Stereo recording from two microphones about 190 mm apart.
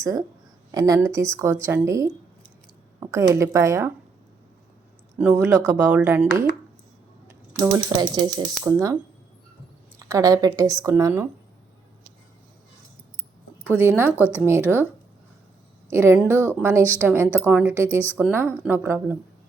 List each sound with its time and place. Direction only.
0.0 s speech: 15° right (ahead or behind)
5.1 s speech: 10° right (ahead or behind)
10.1 s speech: 15° right (ahead or behind)
13.7 s speech: 10° right (ahead or behind)
15.9 s speech: 15° right (ahead or behind)